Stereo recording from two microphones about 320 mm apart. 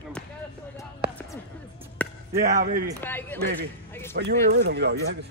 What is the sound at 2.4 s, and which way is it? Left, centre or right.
Speech, right.